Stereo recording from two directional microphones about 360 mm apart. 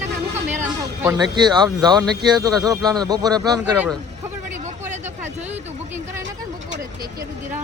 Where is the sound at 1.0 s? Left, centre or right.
Centre.